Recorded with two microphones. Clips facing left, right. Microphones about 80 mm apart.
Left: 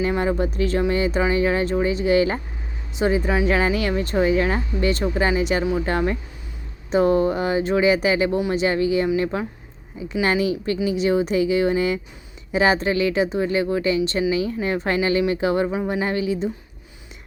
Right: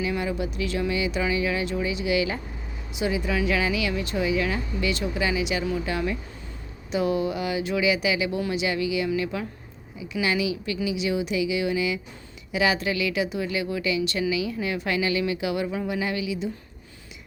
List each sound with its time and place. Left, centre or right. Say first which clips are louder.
0.2 s speech: left 6 dB; left